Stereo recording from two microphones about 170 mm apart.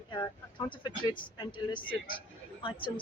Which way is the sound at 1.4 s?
30° left (ahead or behind).